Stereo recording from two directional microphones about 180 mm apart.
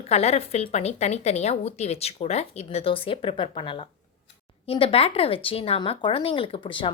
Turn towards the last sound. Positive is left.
turn(degrees=25)  # may be behind; listen again after turning